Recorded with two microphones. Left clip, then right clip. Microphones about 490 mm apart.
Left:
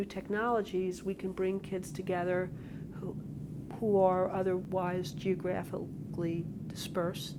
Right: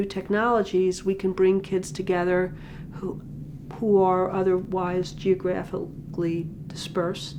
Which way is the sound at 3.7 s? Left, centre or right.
Left.